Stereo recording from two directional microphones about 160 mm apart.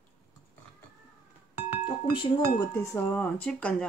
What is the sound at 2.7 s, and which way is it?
Speech, 15° left (ahead or behind).